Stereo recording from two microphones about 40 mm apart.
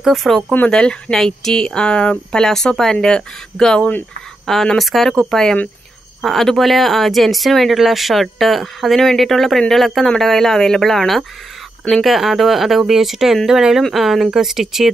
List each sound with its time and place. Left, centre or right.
0.0 s speech: centre
0.7 s speech: left
1.1 s speech: centre
2.4 s speech: centre
4.7 s speech: centre